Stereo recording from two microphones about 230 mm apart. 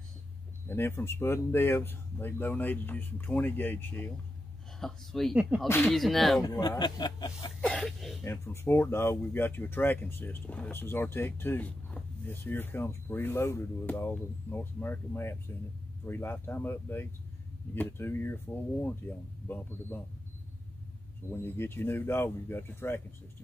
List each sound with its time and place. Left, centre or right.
0.7 s speech: centre
6.4 s speech: centre
7.7 s speech: centre
8.2 s speech: centre
21.3 s speech: centre